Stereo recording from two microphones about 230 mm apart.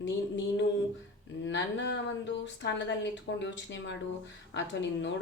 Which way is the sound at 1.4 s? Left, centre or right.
Left.